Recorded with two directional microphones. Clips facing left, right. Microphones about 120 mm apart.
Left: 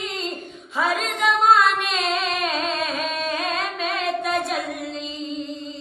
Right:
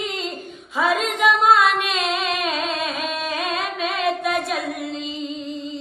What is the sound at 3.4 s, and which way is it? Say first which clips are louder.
Carnatic music: right 1 dB; 5° right (ahead or behind).